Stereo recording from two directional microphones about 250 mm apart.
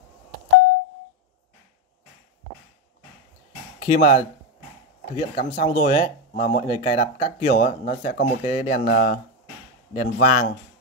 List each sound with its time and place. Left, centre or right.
3.8 s speech: left